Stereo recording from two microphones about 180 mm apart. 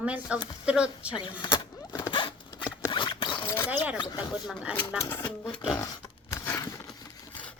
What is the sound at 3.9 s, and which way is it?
Speech, 25° left (ahead or behind).